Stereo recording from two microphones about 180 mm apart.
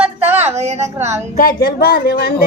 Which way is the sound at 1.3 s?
55° left (ahead or behind).